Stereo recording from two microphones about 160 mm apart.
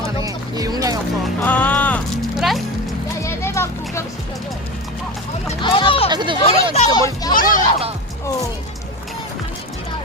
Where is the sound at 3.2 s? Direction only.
15° left (ahead or behind).